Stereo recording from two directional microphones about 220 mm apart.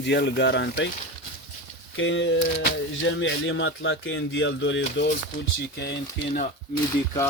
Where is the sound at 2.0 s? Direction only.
60° left (ahead or behind).